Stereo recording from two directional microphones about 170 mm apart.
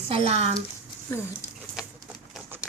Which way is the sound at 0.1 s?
35° right (ahead or behind).